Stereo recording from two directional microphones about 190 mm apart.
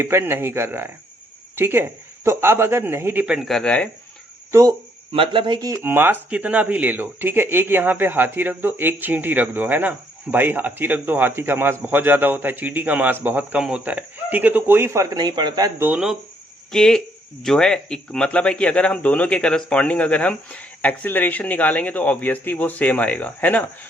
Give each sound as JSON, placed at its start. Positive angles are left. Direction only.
{"t": 0.0, "sound": "a man's voice", "side_deg": -10}
{"t": 5.1, "sound": "speech", "side_deg": -25}
{"t": 5.8, "sound": "a man's voice", "side_deg": -10}
{"t": 15.9, "sound": "speech", "side_deg": -5}